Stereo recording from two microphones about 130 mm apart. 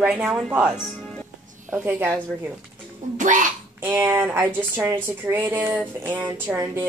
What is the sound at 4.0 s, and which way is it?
Speech, 15° right (ahead or behind).